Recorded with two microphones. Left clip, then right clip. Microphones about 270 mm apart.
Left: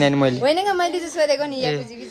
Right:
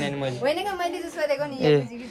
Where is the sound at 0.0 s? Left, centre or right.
Centre.